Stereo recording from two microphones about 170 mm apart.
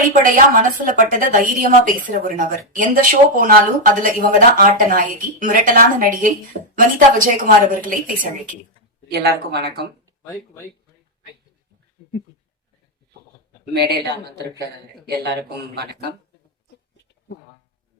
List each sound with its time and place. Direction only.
0.1 s a woman's voice: 55° right (ahead or behind)
9.0 s speech: 75° right (ahead or behind)
13.7 s speech: 70° right (ahead or behind)